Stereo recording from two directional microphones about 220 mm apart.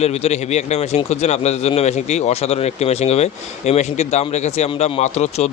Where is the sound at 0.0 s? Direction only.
30° left (ahead or behind).